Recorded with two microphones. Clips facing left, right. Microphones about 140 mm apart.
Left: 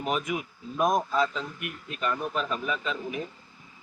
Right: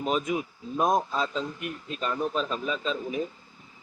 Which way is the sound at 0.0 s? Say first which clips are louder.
Right 2 dB; 25° right (ahead or behind).